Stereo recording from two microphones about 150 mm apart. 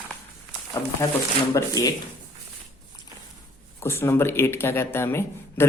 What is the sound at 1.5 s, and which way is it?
Speech, 25° left (ahead or behind).